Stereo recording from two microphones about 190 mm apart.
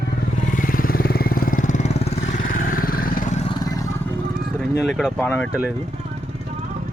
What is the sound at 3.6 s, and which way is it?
Vehicle, 20° left (ahead or behind).